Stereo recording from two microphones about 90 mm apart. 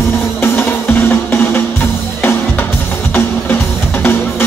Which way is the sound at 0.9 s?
25° left (ahead or behind).